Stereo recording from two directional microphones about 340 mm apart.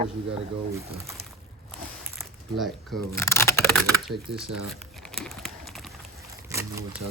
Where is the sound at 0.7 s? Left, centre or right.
Centre.